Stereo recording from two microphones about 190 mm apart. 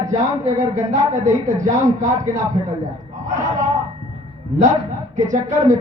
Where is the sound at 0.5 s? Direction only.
40° right (ahead or behind).